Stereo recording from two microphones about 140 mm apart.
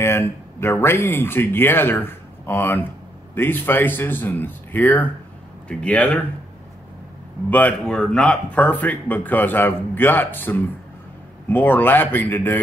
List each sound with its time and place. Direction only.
0.0 s speech: 20° left (ahead or behind)
7.4 s speech: 10° left (ahead or behind)